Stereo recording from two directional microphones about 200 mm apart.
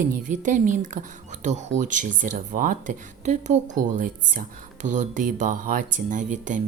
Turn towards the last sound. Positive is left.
turn(degrees=-40)  # may be behind; listen again after turning